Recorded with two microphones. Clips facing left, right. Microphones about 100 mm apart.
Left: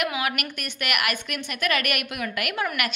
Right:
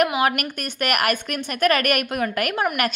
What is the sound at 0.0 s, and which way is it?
A woman's voice, 40° right (ahead or behind).